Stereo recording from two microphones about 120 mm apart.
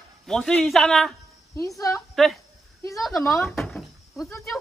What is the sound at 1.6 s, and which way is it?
Speech, 25° left (ahead or behind).